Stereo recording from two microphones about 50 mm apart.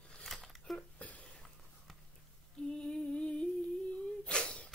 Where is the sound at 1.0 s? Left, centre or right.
Left.